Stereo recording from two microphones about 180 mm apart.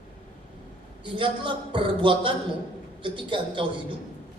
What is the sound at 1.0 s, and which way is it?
A man's voice, 30° right (ahead or behind).